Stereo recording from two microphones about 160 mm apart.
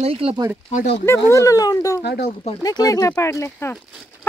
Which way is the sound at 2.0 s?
90° left.